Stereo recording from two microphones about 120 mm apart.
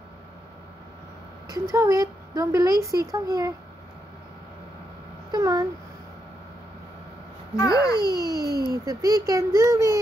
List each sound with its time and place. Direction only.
1.5 s speech: 25° right (ahead or behind)
5.3 s a sound: 30° right (ahead or behind)
7.5 s a child's voice: 30° left (ahead or behind)
8.0 s a child's voice: 35° right (ahead or behind)